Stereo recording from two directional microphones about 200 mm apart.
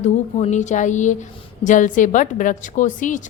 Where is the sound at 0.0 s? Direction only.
35° left (ahead or behind).